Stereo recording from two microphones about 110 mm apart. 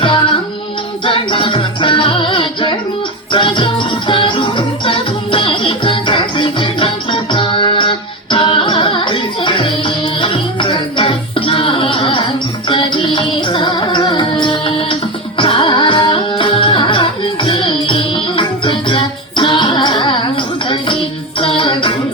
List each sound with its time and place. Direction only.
1.0 s music: 55° left (ahead or behind)